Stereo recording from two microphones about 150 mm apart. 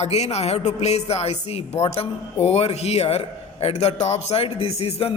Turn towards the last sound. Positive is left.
turn(degrees=40)  # may be behind; listen again after turning